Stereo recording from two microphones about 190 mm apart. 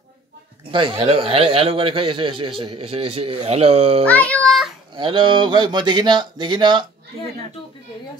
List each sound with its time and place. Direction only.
0.7 s speech: 25° right (ahead or behind)
4.0 s a child's voice: 5° left (ahead or behind)
4.9 s speech: 25° right (ahead or behind)